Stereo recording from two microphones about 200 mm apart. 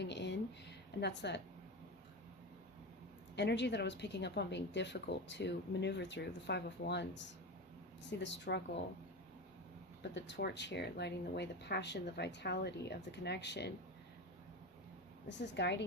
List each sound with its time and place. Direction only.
0.0 s a sound: 60° left (ahead or behind)
1.0 s speech: 60° left (ahead or behind)
3.3 s speech: 60° left (ahead or behind)
10.0 s speech: 60° left (ahead or behind)
15.3 s speech: 60° left (ahead or behind)